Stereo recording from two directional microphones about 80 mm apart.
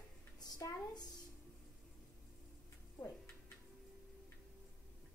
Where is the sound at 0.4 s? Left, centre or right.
Left.